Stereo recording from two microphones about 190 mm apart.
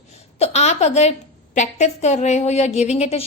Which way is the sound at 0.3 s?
35° left (ahead or behind).